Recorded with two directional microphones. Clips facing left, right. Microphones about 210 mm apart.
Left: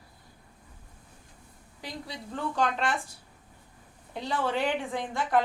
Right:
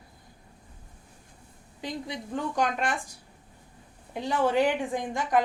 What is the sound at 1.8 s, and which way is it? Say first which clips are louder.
A woman's voice: right 5 dB; 20° right (ahead or behind).